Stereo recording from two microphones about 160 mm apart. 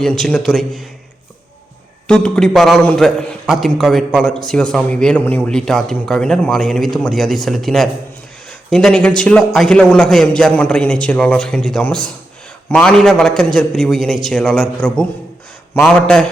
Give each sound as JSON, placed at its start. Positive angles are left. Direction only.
{"t": 0.0, "sound": "a man's voice", "side_deg": 5}
{"t": 2.0, "sound": "a man's voice", "side_deg": 5}